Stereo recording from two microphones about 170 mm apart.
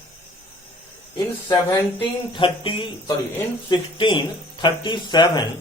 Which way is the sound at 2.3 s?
30° left (ahead or behind).